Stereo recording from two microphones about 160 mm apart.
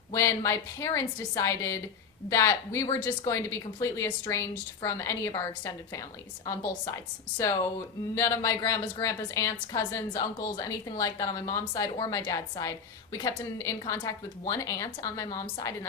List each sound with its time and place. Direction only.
0.1 s a woman's voice: 20° left (ahead or behind)
8.1 s a woman's voice: 20° left (ahead or behind)